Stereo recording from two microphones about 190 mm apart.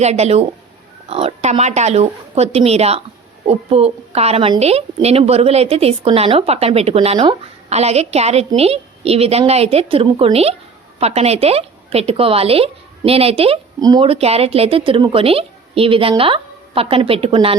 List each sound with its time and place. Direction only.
0.0 s a woman's voice: 35° right (ahead or behind)
13.7 s speech: 20° right (ahead or behind)